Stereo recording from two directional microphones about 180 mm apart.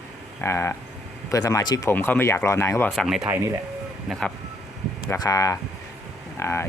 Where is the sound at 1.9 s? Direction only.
10° left (ahead or behind).